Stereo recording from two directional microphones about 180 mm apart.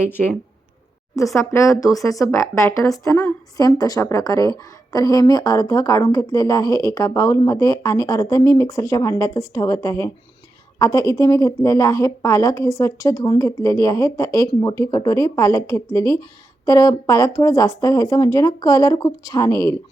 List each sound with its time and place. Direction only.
0.1 s a woman's voice: 10° left (ahead or behind)
1.4 s a woman's voice: 15° left (ahead or behind)